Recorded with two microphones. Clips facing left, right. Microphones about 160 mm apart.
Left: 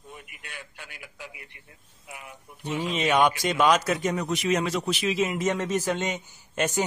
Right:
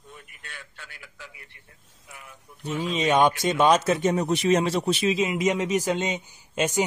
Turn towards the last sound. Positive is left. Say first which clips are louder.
# right 1 dB
turn(degrees=-15)  # may be behind; listen again after turning